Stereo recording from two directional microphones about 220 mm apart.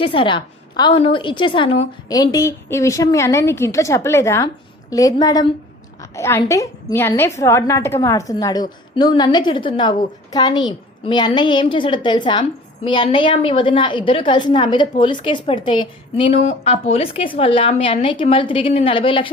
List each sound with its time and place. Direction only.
0.0 s a woman's voice: 25° left (ahead or behind)